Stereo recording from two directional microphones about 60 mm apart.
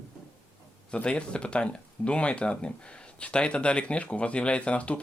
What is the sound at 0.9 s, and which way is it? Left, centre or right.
Speech, centre.